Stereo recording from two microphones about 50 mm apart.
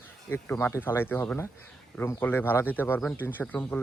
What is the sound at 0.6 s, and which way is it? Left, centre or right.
Speech, left.